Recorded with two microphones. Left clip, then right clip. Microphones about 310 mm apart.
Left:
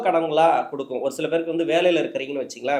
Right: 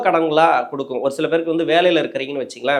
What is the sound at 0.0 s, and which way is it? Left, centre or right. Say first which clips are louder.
A man's voice: right 4 dB; right.